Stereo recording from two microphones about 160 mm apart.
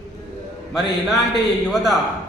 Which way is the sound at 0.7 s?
Centre (ahead or behind).